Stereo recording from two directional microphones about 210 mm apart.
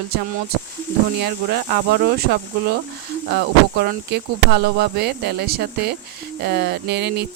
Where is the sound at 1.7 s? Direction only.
50° right (ahead or behind).